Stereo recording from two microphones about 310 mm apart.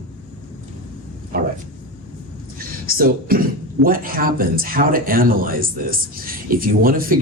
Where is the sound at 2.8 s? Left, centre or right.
Right.